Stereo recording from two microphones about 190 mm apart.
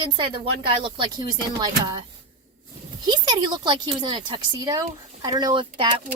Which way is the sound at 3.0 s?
25° right (ahead or behind).